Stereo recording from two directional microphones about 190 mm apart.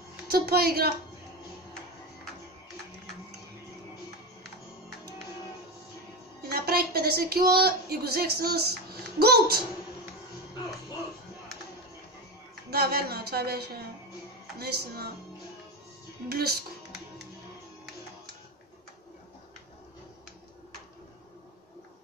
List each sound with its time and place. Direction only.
0.3 s speech: 55° right (ahead or behind)
6.4 s a woman's voice: 55° right (ahead or behind)
12.7 s a woman's voice: 55° right (ahead or behind)
16.3 s speech: 55° right (ahead or behind)